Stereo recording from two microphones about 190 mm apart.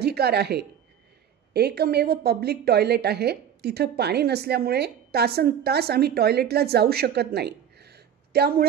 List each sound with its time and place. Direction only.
0.0 s a woman's voice: 60° right (ahead or behind)